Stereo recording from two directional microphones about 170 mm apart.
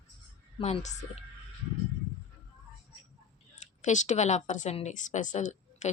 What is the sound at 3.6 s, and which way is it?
A woman's voice, 45° left (ahead or behind).